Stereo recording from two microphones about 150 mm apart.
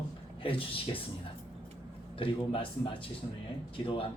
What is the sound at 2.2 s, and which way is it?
Speech, 35° left (ahead or behind).